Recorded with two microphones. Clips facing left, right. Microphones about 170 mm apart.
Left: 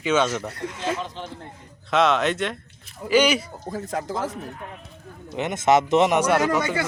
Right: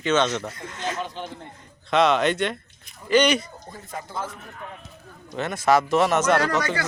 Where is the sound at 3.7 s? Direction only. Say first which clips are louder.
Left 9 dB; 90° left.